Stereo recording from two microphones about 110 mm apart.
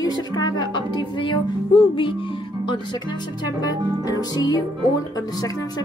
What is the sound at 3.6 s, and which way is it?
Speech, 35° left (ahead or behind).